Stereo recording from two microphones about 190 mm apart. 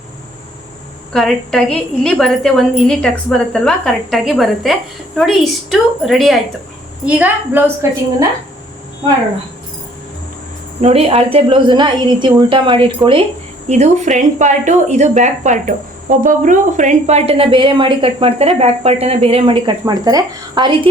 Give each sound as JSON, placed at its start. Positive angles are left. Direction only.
{"t": 1.1, "sound": "a woman's voice", "side_deg": 0}
{"t": 10.8, "sound": "a woman's voice", "side_deg": -30}
{"t": 13.7, "sound": "a woman's voice", "side_deg": -35}